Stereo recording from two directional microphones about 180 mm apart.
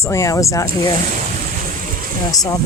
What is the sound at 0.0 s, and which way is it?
Speech, 15° left (ahead or behind).